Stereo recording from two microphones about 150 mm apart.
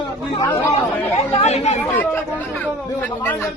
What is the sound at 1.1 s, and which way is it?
Speech, 50° left (ahead or behind).